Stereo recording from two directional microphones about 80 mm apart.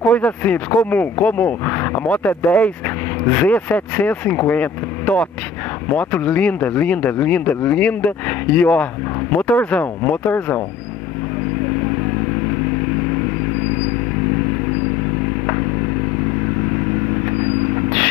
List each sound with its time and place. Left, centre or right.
0.0 s speech: centre
5.9 s speech: centre